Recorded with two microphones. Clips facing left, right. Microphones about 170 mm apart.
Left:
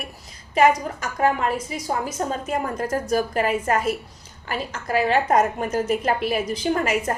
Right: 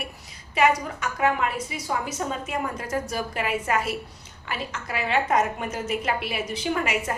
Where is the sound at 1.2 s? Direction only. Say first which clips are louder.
Left 3 dB; 40° left (ahead or behind).